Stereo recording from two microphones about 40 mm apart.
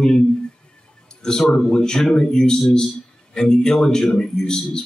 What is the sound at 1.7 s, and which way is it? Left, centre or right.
A man's voice, centre.